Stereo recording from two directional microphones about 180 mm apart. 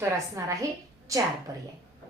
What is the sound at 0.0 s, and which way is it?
A woman's voice, 15° right (ahead or behind).